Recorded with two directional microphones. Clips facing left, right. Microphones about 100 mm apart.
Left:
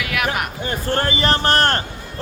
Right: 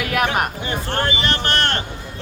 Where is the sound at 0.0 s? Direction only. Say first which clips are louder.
Right 3 dB; 40° right (ahead or behind).